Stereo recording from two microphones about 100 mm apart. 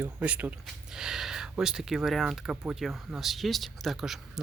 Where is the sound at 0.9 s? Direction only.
5° right (ahead or behind).